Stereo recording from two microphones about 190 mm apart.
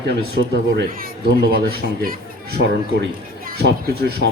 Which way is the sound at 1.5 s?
55° right (ahead or behind).